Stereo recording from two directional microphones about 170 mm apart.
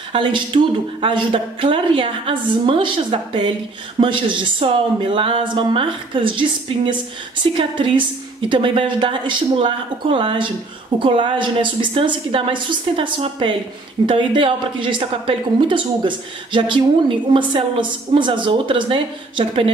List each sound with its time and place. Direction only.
0.1 s a woman's voice: 30° right (ahead or behind)
7.5 s a woman's voice: 30° right (ahead or behind)